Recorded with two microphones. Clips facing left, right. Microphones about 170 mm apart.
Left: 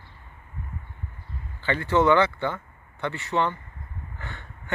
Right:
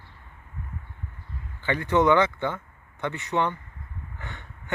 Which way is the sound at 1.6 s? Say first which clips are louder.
Even; 15° right (ahead or behind).